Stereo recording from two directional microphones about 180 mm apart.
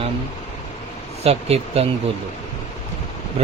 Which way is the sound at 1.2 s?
35° right (ahead or behind).